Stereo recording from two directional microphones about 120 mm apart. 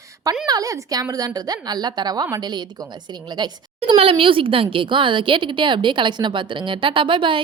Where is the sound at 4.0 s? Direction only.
50° right (ahead or behind).